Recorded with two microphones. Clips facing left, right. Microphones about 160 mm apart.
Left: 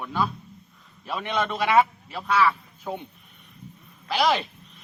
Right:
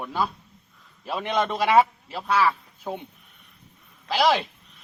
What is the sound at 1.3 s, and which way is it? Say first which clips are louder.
A man's voice: right 2 dB; 35° right (ahead or behind).